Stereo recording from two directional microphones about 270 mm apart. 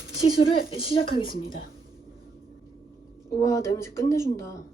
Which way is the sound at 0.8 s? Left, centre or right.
Centre.